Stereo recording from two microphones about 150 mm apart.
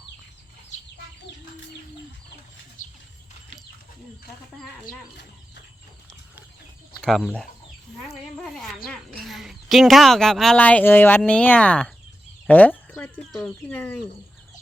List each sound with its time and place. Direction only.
2.8 s horse: 60° left (ahead or behind)
7.0 s speech: centre (ahead or behind)
8.0 s a sound: centre (ahead or behind)
8.9 s a woman's voice: 5° left (ahead or behind)